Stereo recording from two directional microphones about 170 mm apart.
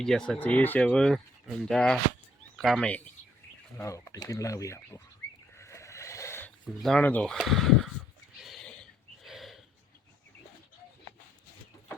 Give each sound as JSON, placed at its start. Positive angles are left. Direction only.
{"t": 0.0, "sound": "speech", "side_deg": 5}
{"t": 3.8, "sound": "speech", "side_deg": 20}
{"t": 5.5, "sound": "goat", "side_deg": 15}
{"t": 6.8, "sound": "speech", "side_deg": 5}
{"t": 8.4, "sound": "a sound", "side_deg": 0}